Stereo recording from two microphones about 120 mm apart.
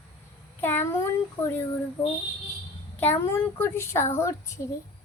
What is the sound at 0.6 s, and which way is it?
Speech, 20° left (ahead or behind).